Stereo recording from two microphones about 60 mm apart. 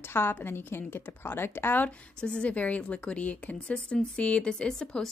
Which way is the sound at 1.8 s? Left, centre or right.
Centre.